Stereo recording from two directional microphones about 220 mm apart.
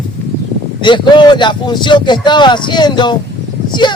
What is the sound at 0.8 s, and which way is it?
Speech, 20° left (ahead or behind).